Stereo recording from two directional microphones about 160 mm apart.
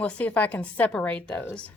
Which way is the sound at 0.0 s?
10° left (ahead or behind).